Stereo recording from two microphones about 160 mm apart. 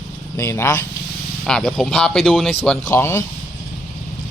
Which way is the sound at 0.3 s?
15° left (ahead or behind).